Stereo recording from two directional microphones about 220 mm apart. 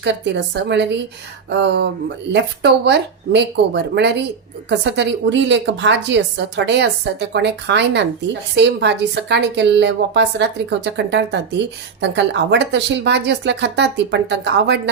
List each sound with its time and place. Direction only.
0.0 s a woman's voice: 50° right (ahead or behind)